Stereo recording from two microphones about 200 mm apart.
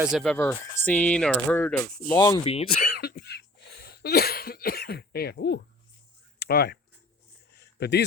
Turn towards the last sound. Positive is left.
turn(degrees=55)  # may be behind; listen again after turning